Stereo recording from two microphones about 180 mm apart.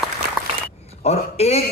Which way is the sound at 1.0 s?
35° left (ahead or behind).